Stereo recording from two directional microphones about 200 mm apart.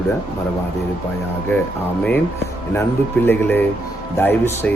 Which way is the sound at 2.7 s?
10° left (ahead or behind).